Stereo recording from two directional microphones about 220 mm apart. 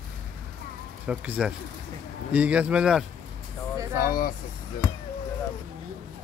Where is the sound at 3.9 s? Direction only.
40° left (ahead or behind).